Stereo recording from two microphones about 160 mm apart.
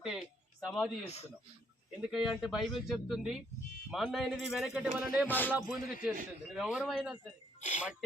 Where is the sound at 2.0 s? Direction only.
5° right (ahead or behind).